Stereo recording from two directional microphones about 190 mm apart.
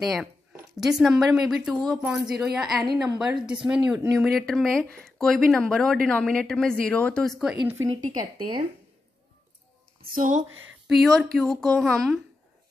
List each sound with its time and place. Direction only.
0.0 s speech: centre (ahead or behind)
7.6 s speech: 15° right (ahead or behind)
8.2 s speech: 25° right (ahead or behind)
10.0 s speech: 45° right (ahead or behind)
10.9 s speech: centre (ahead or behind)